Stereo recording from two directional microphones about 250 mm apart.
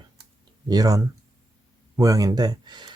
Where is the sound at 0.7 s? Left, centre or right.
Centre.